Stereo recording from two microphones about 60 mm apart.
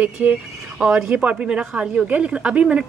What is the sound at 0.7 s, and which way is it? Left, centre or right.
A woman's voice, centre.